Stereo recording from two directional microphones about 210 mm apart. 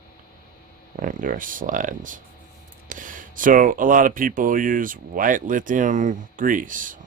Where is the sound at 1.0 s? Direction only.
40° right (ahead or behind).